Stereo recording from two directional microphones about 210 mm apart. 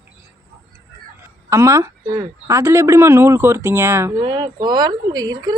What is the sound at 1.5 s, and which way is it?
Speech, 15° right (ahead or behind).